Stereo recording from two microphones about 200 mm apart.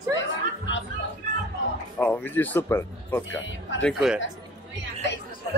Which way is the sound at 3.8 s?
Centre (ahead or behind).